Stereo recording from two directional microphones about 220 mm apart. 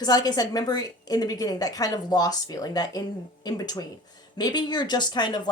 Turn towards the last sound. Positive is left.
turn(degrees=20)  # may be behind; listen again after turning